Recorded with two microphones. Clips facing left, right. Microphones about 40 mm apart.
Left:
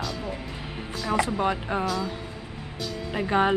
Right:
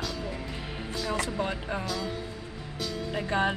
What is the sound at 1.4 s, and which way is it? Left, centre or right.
Speech, left.